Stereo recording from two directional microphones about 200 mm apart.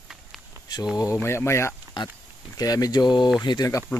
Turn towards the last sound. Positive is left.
turn(degrees=20)  # may be behind; listen again after turning